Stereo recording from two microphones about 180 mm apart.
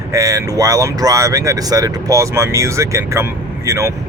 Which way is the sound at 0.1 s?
15° right (ahead or behind).